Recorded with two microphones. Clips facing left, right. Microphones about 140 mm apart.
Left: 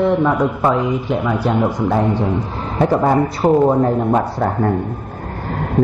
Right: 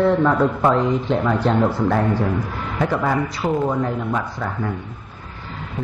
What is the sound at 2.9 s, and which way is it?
Speech, 35° left (ahead or behind).